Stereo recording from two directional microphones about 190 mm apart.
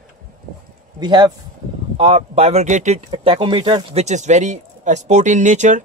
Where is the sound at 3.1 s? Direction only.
25° right (ahead or behind).